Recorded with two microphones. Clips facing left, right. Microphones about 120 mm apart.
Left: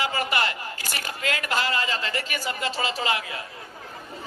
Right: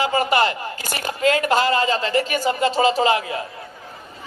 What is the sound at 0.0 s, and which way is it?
A man's voice, 30° right (ahead or behind).